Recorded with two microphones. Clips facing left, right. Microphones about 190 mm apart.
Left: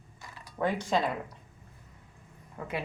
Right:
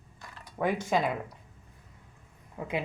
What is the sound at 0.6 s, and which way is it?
Speech, 10° right (ahead or behind).